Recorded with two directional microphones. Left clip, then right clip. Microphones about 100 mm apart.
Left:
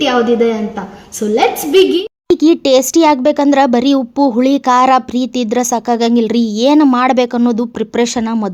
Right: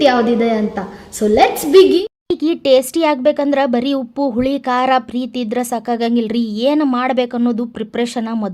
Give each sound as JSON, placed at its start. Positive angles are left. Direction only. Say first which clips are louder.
{"t": 0.0, "sound": "a woman's voice", "louder": "left 1 dB", "side_deg": -15}
{"t": 1.7, "sound": "a woman's voice", "louder": "right 2 dB", "side_deg": -15}
{"t": 2.2, "sound": "speech", "louder": "left 5 dB", "side_deg": 45}